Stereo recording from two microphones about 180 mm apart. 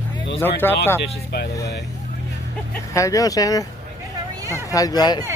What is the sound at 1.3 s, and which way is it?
Speech, 65° left (ahead or behind).